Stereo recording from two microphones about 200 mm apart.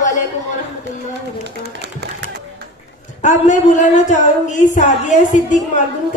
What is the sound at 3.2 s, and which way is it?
Speech, 35° left (ahead or behind).